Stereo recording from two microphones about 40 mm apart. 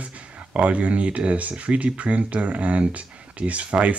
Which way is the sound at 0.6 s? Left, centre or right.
Right.